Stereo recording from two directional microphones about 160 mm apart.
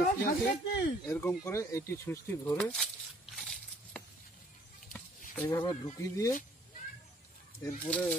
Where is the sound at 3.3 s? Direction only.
5° left (ahead or behind).